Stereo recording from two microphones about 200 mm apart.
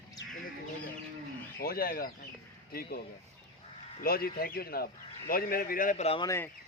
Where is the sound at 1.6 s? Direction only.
50° left (ahead or behind).